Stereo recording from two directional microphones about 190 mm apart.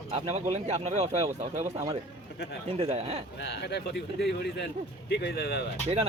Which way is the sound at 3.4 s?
60° left (ahead or behind).